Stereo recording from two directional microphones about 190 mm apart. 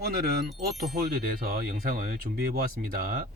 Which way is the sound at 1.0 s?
50° right (ahead or behind).